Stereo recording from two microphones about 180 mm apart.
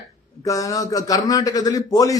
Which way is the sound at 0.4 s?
20° left (ahead or behind).